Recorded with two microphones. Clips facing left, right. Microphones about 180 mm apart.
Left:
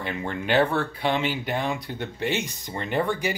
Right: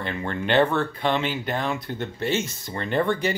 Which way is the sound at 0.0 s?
15° left (ahead or behind).